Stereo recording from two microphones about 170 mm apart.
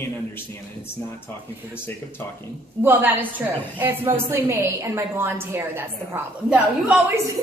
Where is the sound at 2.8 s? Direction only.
10° right (ahead or behind).